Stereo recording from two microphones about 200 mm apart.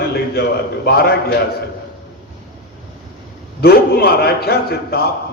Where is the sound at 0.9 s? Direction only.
50° left (ahead or behind).